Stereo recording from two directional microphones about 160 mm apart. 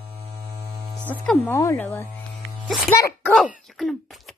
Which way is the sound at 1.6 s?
20° left (ahead or behind).